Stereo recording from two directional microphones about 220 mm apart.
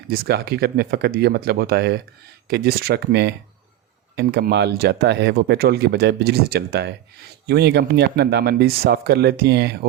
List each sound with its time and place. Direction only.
0.1 s speech: 45° right (ahead or behind)